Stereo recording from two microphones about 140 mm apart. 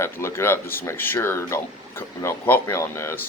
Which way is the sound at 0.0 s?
20° left (ahead or behind).